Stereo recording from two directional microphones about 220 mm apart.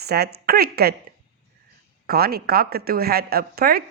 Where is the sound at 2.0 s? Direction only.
45° right (ahead or behind).